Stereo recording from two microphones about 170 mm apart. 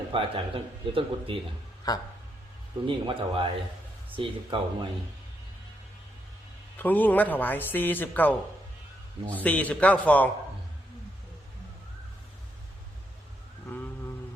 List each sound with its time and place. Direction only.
0.1 s a man's voice: 30° right (ahead or behind)
1.9 s speech: 20° left (ahead or behind)
2.8 s a man's voice: 30° right (ahead or behind)
6.7 s speech: 10° left (ahead or behind)